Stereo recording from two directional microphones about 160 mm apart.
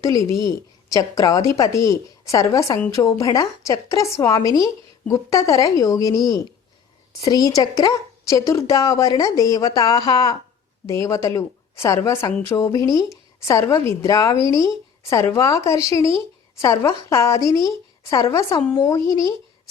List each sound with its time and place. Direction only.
0.9 s a woman's voice: 20° left (ahead or behind)